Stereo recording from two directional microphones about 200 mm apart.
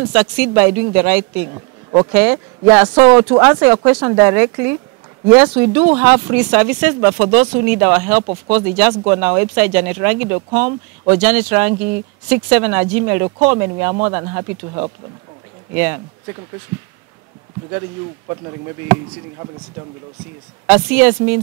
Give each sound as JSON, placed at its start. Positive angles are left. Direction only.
{"t": 0.1, "sound": "speech", "side_deg": -10}
{"t": 20.6, "sound": "speech", "side_deg": -10}